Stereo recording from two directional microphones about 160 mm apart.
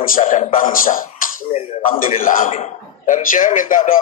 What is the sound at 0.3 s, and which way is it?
A man's voice, 55° left (ahead or behind).